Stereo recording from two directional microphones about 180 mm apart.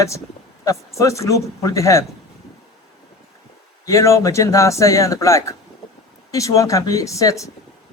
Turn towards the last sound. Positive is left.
turn(degrees=15)  # may be behind; listen again after turning